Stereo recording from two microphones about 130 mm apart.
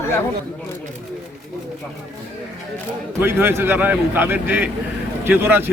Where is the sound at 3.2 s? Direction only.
15° right (ahead or behind).